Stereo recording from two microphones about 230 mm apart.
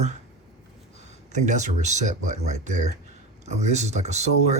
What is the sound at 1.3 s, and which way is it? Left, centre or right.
A man's voice, right.